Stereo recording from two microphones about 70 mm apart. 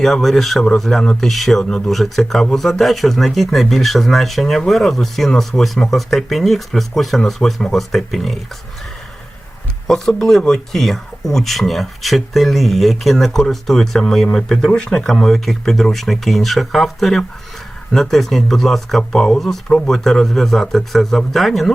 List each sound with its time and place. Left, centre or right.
0.0 s speech: centre
10.2 s speech: centre